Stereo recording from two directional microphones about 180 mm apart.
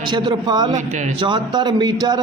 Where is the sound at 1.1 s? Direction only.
25° right (ahead or behind).